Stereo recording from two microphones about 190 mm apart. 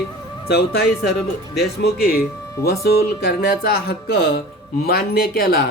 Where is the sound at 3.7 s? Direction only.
55° left (ahead or behind).